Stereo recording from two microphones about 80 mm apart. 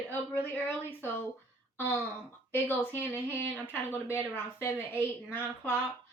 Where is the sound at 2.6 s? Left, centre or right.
Left.